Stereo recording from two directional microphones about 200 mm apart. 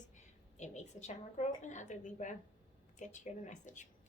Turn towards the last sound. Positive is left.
turn(degrees=40)  # may be behind; listen again after turning